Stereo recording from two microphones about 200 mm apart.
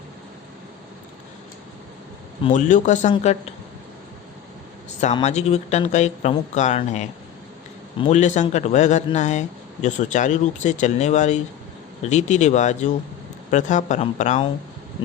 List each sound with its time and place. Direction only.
2.5 s speech: 40° left (ahead or behind)
5.1 s speech: 35° left (ahead or behind)